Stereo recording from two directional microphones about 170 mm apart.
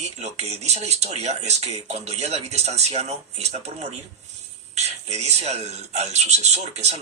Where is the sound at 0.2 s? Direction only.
40° right (ahead or behind).